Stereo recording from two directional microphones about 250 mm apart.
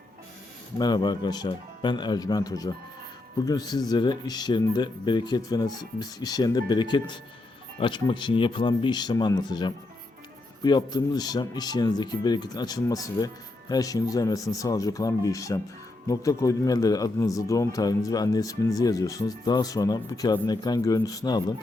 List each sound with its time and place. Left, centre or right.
0.8 s speech: centre